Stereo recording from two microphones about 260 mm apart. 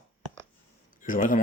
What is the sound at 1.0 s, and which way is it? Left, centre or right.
Speech, left.